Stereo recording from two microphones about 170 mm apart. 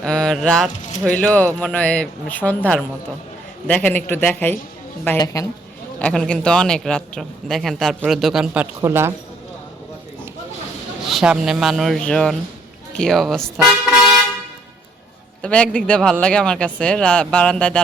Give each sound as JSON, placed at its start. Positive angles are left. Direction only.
{"t": 0.0, "sound": "a man's voice", "side_deg": 5}
{"t": 6.0, "sound": "speech", "side_deg": 5}
{"t": 8.8, "sound": "speech", "side_deg": -15}
{"t": 11.0, "sound": "speech", "side_deg": 0}
{"t": 15.4, "sound": "speech", "side_deg": 5}